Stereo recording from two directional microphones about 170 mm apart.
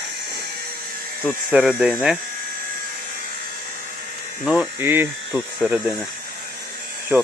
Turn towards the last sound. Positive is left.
turn(degrees=0)  # may be behind; listen again after turning